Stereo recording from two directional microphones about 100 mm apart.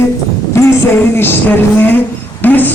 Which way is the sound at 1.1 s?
20° left (ahead or behind).